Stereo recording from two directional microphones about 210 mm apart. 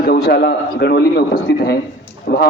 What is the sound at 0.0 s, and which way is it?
A man's voice, 50° left (ahead or behind).